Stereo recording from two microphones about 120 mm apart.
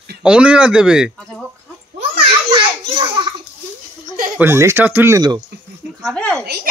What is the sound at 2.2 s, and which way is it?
Children playing, 40° right (ahead or behind).